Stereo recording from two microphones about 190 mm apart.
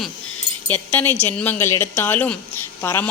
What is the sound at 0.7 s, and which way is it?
Speech, 10° left (ahead or behind).